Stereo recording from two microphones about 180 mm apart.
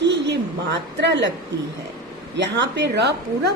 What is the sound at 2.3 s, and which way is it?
Speech, 80° right.